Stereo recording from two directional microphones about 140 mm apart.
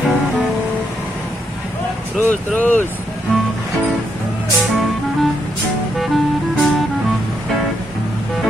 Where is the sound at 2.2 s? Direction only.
10° left (ahead or behind).